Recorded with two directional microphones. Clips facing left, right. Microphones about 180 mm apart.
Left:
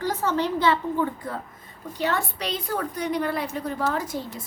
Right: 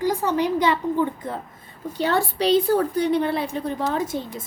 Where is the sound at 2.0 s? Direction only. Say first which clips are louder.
Right 5 dB; 30° right (ahead or behind).